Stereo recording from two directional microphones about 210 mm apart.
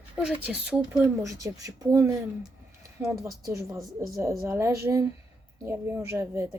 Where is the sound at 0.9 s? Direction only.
15° right (ahead or behind).